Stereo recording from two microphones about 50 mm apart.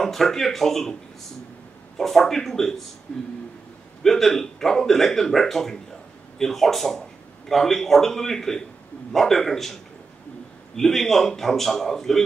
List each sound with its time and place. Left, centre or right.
0.0 s a man's voice: centre
2.0 s a man's voice: centre
3.1 s speech: left
4.0 s a man's voice: centre
10.8 s a man's voice: centre